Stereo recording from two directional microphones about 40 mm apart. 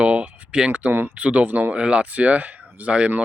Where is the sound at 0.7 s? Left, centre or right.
Right.